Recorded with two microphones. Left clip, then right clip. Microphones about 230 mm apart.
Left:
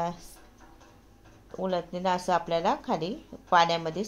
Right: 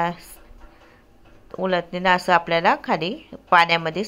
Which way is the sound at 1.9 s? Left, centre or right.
Centre.